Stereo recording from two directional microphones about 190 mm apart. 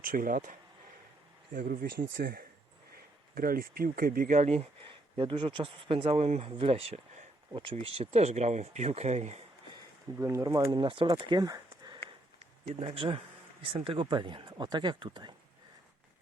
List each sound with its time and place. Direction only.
0.0 s speech: 50° right (ahead or behind)
1.5 s speech: 50° right (ahead or behind)
3.3 s speech: 50° right (ahead or behind)
9.7 s speech: 15° right (ahead or behind)
12.7 s speech: 30° right (ahead or behind)